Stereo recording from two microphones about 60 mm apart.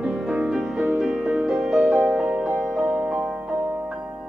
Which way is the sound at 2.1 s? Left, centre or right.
Centre.